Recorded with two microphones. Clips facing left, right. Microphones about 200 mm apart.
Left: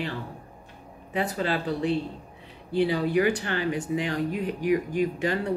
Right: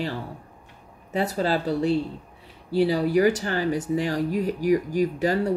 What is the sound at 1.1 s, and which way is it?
Speech, 40° right (ahead or behind).